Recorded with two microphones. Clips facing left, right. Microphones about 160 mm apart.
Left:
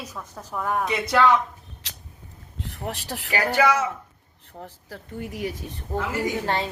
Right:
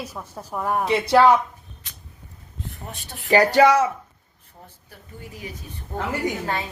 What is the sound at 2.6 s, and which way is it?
Speech, 90° left.